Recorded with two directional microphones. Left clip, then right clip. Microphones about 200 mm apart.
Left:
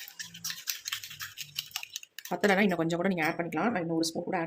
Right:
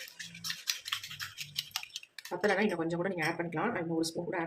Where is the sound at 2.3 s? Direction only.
45° left (ahead or behind).